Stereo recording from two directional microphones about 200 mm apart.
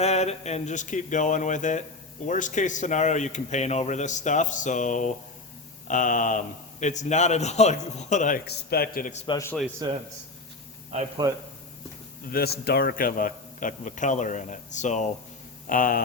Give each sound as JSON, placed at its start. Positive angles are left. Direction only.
{"t": 0.0, "sound": "speech", "side_deg": 35}
{"t": 8.4, "sound": "a man's voice", "side_deg": 50}
{"t": 9.2, "sound": "speech", "side_deg": 20}
{"t": 9.8, "sound": "a man's voice", "side_deg": -20}
{"t": 11.2, "sound": "a man's voice", "side_deg": -20}
{"t": 12.3, "sound": "a man's voice", "side_deg": 50}